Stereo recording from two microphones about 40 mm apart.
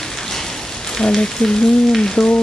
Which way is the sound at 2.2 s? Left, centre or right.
Centre.